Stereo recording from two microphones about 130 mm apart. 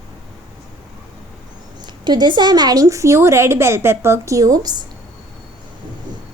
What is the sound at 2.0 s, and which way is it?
A woman's voice, 35° right (ahead or behind).